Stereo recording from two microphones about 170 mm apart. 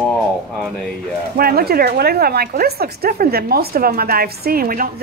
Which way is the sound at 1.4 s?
65° right (ahead or behind).